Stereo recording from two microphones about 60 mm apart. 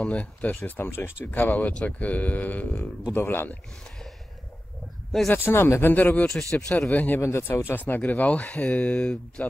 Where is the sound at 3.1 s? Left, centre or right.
Left.